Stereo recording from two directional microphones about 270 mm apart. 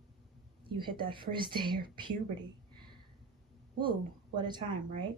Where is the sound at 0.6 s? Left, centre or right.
Centre.